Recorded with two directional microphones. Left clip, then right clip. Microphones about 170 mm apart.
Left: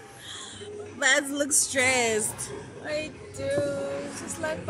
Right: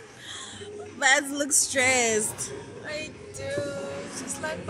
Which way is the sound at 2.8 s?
50° left (ahead or behind).